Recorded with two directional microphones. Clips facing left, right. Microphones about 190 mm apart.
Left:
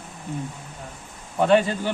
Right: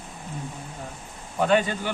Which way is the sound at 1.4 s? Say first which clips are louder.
Left 3 dB; 30° left (ahead or behind).